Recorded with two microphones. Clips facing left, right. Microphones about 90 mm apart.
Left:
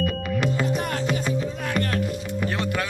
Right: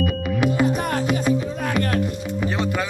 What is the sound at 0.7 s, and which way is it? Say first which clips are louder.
Music: right 3 dB; 40° right (ahead or behind).